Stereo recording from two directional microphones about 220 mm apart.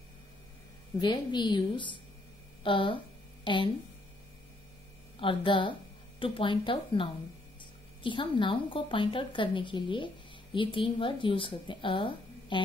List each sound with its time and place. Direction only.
1.0 s speech: 20° left (ahead or behind)
5.2 s speech: 25° left (ahead or behind)